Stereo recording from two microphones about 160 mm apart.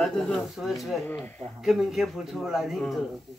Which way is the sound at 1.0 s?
10° left (ahead or behind).